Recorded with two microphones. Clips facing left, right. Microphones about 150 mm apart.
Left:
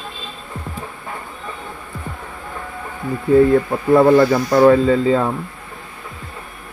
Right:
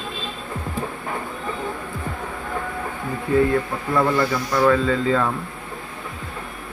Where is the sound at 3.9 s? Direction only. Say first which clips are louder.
Left 9 dB; 35° left (ahead or behind).